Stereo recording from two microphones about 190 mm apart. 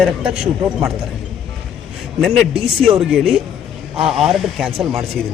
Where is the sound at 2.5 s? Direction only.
30° right (ahead or behind).